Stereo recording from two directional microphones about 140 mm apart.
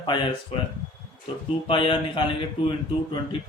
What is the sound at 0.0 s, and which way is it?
A man's voice, 30° left (ahead or behind).